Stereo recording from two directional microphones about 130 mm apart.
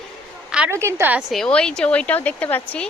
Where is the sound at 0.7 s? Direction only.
20° right (ahead or behind).